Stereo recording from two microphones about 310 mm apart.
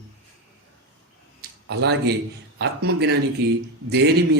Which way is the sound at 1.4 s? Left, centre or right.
Right.